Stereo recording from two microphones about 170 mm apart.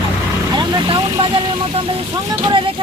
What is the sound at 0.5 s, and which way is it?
Speech, 25° right (ahead or behind).